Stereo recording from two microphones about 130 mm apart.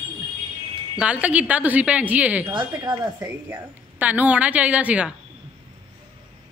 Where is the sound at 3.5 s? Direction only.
15° right (ahead or behind).